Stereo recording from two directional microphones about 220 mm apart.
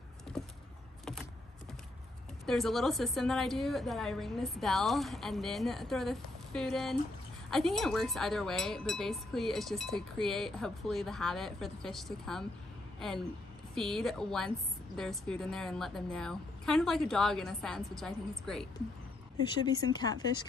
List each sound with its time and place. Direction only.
2.4 s speech: centre (ahead or behind)
19.6 s speech: 20° left (ahead or behind)